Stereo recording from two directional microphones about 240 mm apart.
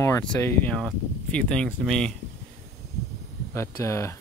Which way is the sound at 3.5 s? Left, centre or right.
Centre.